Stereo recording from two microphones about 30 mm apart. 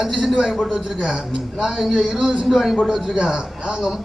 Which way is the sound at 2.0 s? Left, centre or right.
Centre.